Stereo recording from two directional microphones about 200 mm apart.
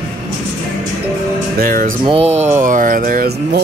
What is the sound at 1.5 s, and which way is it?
Music, 45° right (ahead or behind).